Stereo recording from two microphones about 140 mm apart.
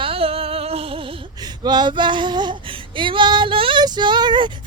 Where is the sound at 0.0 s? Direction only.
45° right (ahead or behind).